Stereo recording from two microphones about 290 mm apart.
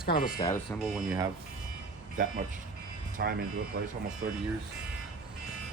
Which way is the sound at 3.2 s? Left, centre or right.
Right.